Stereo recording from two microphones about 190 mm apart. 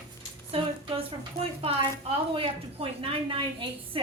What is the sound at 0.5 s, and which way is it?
A woman's voice, 30° right (ahead or behind).